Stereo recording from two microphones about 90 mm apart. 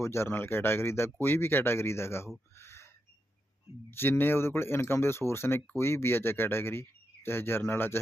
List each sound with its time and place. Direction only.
0.0 s speech: 30° left (ahead or behind)
2.6 s owl: 30° left (ahead or behind)
3.9 s speech: 25° left (ahead or behind)